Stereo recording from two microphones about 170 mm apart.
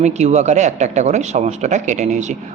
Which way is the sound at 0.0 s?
40° right (ahead or behind).